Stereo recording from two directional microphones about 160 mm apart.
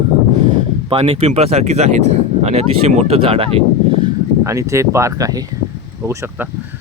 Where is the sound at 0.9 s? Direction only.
40° right (ahead or behind).